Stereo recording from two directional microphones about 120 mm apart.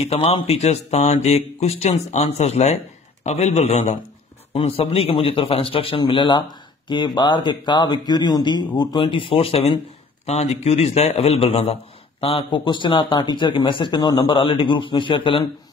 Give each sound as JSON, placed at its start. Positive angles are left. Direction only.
{"t": 0.0, "sound": "a man's voice", "side_deg": 55}